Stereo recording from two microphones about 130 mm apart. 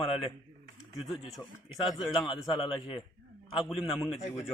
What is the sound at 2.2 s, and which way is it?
Speech, centre (ahead or behind).